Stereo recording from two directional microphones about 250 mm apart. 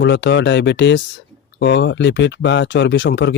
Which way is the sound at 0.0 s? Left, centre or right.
Left.